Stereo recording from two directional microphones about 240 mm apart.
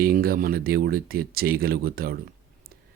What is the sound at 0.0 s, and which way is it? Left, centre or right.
Speech, right.